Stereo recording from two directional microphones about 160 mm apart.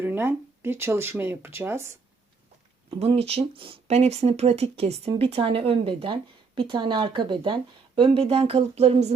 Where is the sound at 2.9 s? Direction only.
35° right (ahead or behind).